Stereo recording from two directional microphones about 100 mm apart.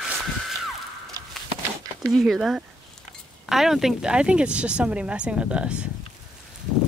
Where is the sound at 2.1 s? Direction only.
Centre (ahead or behind).